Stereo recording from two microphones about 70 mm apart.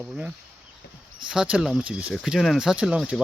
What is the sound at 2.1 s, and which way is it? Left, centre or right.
Speech, centre.